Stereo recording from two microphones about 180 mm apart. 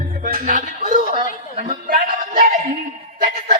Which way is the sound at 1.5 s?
45° right (ahead or behind).